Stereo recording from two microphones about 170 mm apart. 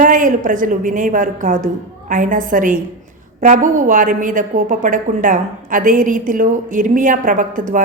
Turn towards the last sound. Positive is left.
turn(degrees=-50)  # may be behind; listen again after turning